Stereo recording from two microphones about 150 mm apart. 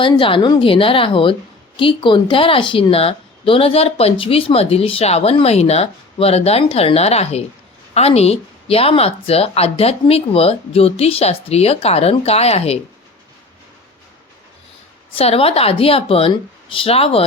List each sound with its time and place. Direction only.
0.0 s a woman's voice: 35° left (ahead or behind)
15.1 s a woman's voice: 40° left (ahead or behind)